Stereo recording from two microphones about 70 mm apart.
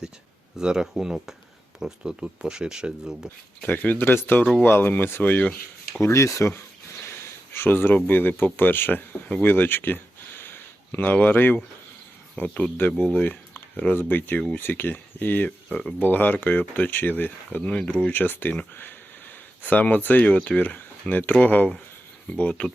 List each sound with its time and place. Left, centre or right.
0.5 s speech: centre
3.2 s speech: left
6.0 s speech: left
19.6 s speech: left